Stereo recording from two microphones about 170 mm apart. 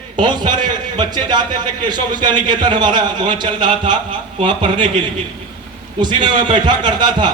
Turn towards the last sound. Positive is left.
turn(degrees=-25)  # may be behind; listen again after turning